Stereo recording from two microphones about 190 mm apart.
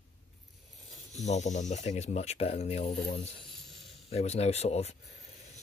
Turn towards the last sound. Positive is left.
turn(degrees=35)  # may be behind; listen again after turning